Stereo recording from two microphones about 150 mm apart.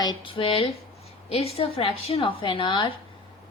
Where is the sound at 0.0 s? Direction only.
30° left (ahead or behind).